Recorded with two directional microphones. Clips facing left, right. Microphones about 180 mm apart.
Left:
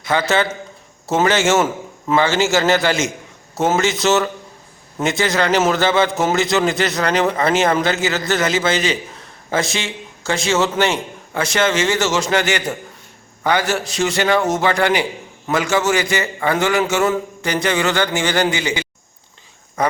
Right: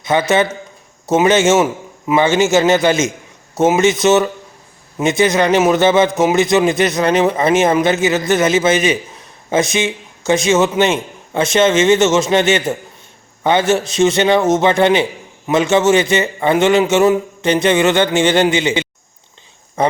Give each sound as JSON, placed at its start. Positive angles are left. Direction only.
{"t": 0.0, "sound": "a man's voice", "side_deg": -20}